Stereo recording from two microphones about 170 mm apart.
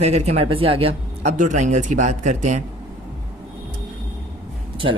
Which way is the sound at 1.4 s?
45° right (ahead or behind).